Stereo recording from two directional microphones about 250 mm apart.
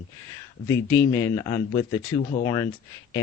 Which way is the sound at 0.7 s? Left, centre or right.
Centre.